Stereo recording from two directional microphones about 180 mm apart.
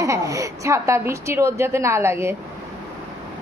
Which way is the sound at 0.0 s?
15° right (ahead or behind).